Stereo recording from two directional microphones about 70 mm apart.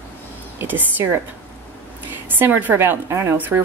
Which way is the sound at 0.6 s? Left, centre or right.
Right.